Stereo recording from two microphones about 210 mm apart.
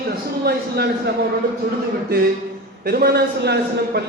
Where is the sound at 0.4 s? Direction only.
50° right (ahead or behind).